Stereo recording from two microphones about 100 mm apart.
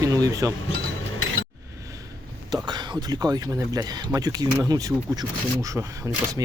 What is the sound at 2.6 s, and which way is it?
Speech, 45° right (ahead or behind).